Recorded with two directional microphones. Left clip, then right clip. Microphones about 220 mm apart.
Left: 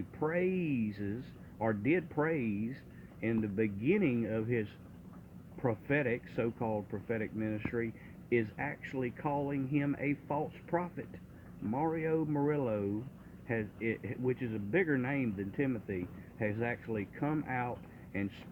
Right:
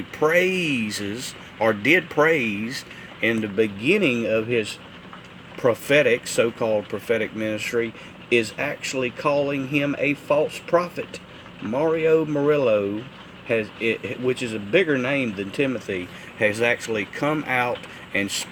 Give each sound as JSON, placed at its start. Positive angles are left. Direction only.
{"t": 0.2, "sound": "speech", "side_deg": -15}
{"t": 5.6, "sound": "speech", "side_deg": -15}